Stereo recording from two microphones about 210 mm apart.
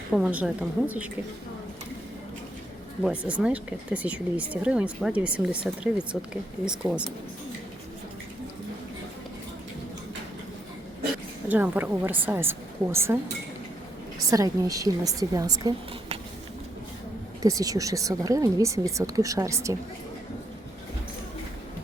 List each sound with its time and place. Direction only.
0.1 s speech: 5° right (ahead or behind)
3.0 s speech: 5° right (ahead or behind)
11.4 s a woman's voice: 10° right (ahead or behind)
14.3 s a woman's voice: 15° right (ahead or behind)
17.4 s a woman's voice: 15° right (ahead or behind)